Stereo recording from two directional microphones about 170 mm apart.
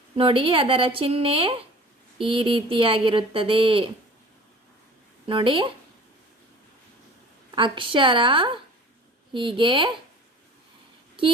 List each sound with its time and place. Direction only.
0.2 s speech: 30° right (ahead or behind)
5.2 s a woman's voice: 30° right (ahead or behind)
7.5 s a woman's voice: 30° right (ahead or behind)